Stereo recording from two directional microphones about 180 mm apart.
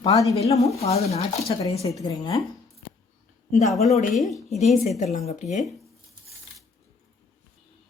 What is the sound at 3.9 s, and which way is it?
Speech, 45° left (ahead or behind).